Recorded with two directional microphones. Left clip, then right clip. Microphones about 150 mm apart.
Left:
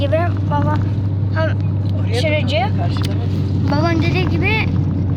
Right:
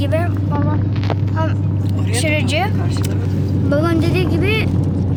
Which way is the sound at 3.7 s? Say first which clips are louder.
Right 1 dB; 5° left (ahead or behind).